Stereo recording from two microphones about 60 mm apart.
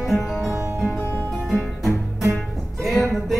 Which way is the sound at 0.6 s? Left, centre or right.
Right.